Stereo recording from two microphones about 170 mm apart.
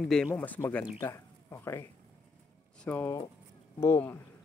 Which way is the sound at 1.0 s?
15° left (ahead or behind).